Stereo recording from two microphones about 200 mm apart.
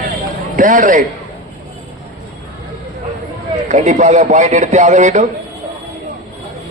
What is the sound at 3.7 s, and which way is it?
Speech, 35° right (ahead or behind).